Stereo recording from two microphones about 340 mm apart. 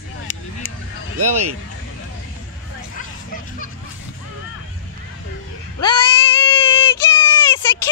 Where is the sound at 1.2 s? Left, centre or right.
Right.